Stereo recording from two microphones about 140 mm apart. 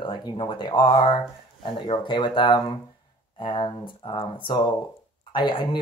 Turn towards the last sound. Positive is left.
turn(degrees=35)  # may be behind; listen again after turning